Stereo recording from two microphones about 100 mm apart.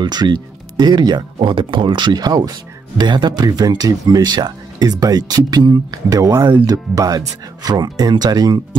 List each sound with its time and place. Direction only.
0.0 s speech: 45° right (ahead or behind)